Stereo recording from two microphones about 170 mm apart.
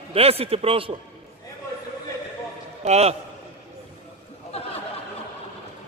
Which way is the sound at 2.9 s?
40° right (ahead or behind).